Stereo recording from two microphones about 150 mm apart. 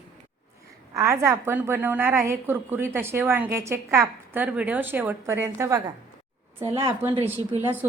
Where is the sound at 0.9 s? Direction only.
20° right (ahead or behind).